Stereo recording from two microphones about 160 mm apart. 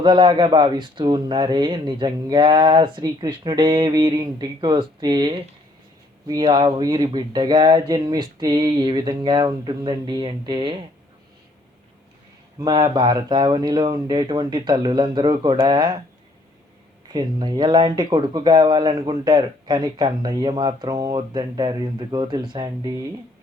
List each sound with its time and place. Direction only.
0.0 s speech: 30° right (ahead or behind)
12.5 s speech: 25° right (ahead or behind)
17.1 s speech: 25° right (ahead or behind)